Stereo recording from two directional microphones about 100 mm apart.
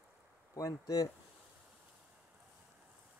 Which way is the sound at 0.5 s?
35° left (ahead or behind).